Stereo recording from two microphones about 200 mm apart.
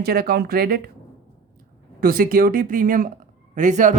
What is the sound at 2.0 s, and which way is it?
Speech, 45° right (ahead or behind).